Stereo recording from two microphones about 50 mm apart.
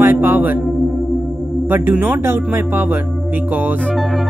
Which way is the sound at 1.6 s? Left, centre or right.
Right.